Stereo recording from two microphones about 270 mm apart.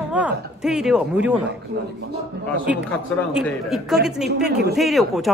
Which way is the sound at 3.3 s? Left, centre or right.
Centre.